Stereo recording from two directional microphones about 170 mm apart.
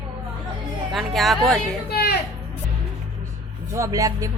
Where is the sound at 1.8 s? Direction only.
70° left (ahead or behind).